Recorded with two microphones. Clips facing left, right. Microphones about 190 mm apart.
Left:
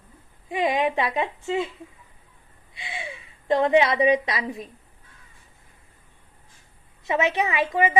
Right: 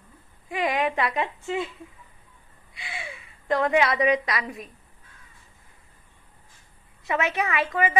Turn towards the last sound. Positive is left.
turn(degrees=20)  # may be behind; listen again after turning